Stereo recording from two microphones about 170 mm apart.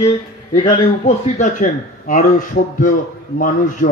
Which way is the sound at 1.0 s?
50° left (ahead or behind).